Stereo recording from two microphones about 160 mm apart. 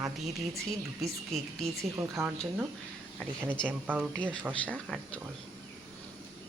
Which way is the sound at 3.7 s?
10° right (ahead or behind).